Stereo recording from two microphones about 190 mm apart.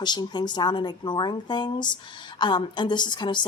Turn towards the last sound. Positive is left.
turn(degrees=25)  # may be behind; listen again after turning